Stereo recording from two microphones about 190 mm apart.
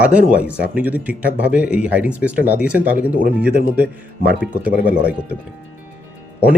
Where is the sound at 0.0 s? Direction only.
5° right (ahead or behind).